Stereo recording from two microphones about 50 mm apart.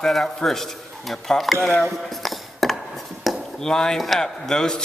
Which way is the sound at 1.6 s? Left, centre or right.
Left.